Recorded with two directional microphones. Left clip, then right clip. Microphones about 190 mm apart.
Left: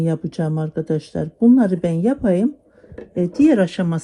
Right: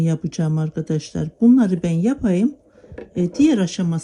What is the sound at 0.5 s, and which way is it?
Speech, 20° right (ahead or behind).